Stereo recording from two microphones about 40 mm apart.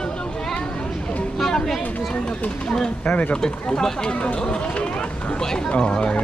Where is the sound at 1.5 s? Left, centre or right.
Centre.